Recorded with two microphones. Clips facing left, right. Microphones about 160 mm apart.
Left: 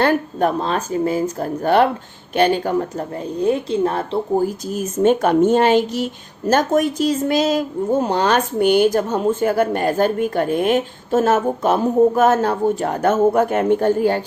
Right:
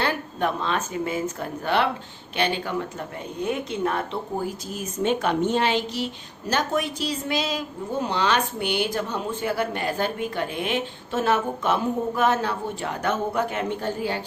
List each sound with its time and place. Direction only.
0.0 s a woman's voice: 45° left (ahead or behind)